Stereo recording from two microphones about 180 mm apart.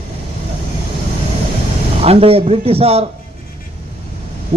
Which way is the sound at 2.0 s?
35° right (ahead or behind).